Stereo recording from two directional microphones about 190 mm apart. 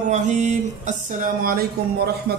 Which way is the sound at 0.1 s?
40° right (ahead or behind).